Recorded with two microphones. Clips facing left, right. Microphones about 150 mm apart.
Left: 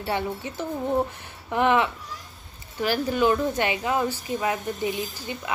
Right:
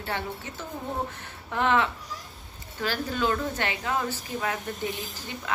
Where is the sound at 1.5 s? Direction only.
15° left (ahead or behind).